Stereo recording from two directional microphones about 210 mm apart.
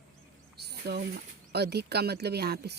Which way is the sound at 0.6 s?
50° right (ahead or behind).